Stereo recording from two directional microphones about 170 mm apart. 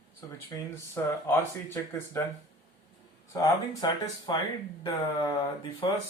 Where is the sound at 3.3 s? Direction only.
25° left (ahead or behind).